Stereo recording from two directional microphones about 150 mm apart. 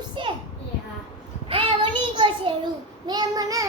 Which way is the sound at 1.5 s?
35° right (ahead or behind).